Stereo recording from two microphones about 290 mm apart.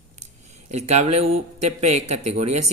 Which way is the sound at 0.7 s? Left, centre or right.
Right.